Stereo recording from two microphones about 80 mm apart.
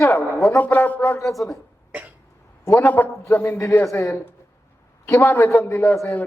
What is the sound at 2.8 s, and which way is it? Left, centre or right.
A man's voice, left.